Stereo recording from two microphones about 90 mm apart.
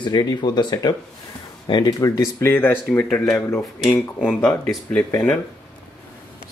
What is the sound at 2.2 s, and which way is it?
Speech, 25° left (ahead or behind).